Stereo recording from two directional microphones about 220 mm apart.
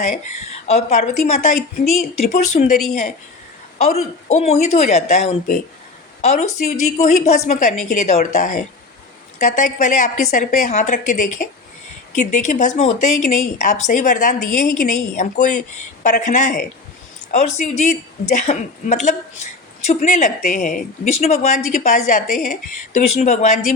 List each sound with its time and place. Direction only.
0.7 s a woman's voice: 30° left (ahead or behind)
3.8 s a woman's voice: 30° left (ahead or behind)